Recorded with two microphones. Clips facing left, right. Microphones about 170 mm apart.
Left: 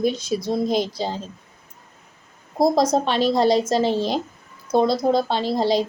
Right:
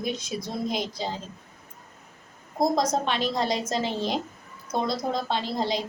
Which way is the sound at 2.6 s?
35° left (ahead or behind).